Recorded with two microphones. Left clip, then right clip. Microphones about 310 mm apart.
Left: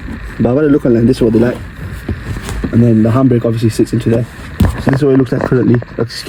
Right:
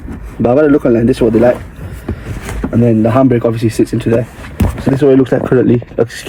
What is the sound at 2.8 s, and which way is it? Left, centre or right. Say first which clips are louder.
Speech: right 2 dB; centre.